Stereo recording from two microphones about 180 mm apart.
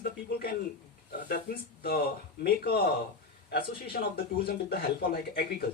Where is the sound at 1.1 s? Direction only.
60° left (ahead or behind).